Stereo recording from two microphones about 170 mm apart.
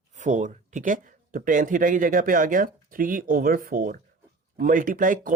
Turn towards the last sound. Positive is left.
turn(degrees=-55)  # may be behind; listen again after turning